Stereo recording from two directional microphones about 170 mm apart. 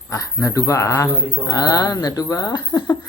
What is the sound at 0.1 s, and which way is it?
Speech, 20° left (ahead or behind).